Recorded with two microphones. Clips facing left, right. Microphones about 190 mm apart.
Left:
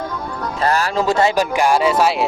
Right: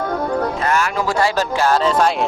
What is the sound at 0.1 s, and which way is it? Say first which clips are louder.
Music: right 7 dB; 60° right (ahead or behind).